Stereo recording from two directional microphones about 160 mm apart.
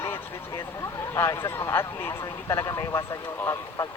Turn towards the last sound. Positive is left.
turn(degrees=20)  # may be behind; listen again after turning